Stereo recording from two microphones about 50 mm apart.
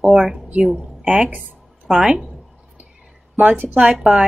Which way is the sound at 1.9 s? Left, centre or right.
Centre.